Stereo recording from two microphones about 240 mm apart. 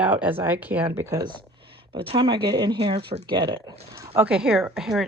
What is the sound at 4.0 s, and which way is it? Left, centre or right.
Speech, centre.